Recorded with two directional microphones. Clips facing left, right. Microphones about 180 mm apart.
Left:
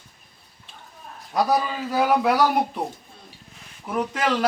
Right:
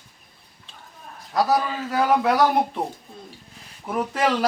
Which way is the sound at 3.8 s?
5° right (ahead or behind).